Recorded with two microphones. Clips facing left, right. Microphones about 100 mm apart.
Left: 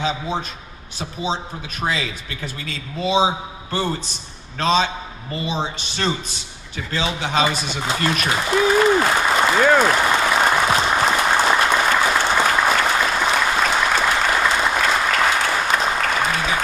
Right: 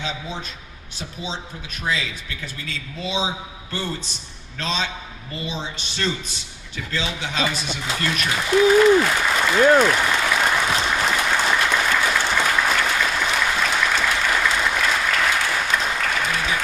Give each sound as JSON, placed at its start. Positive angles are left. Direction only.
{"t": 0.0, "sound": "speech", "side_deg": 55}
{"t": 1.8, "sound": "a man's voice", "side_deg": 45}
{"t": 4.5, "sound": "speech", "side_deg": 55}
{"t": 5.5, "sound": "speech", "side_deg": 45}
{"t": 9.8, "sound": "applause", "side_deg": 30}